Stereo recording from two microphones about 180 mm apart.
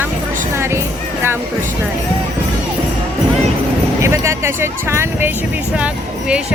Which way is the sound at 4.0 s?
15° right (ahead or behind).